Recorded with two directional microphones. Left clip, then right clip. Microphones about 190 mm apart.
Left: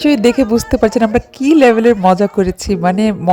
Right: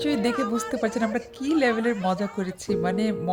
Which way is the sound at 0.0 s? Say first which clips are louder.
Left 13 dB; 40° left (ahead or behind).